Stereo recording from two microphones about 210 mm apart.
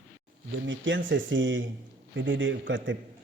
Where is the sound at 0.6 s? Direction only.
60° right (ahead or behind).